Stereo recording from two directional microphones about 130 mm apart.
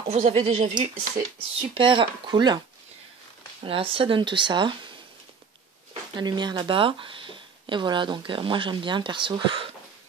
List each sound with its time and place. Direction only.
0.3 s speech: 50° right (ahead or behind)
1.8 s speech: 40° right (ahead or behind)
3.6 s speech: 45° right (ahead or behind)
6.1 s speech: 35° right (ahead or behind)